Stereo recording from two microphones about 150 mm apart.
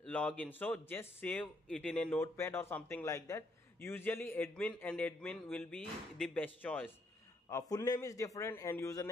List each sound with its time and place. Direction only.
0.0 s a man's voice: 10° left (ahead or behind)
2.2 s a man's voice: 20° left (ahead or behind)
7.7 s a man's voice: 25° left (ahead or behind)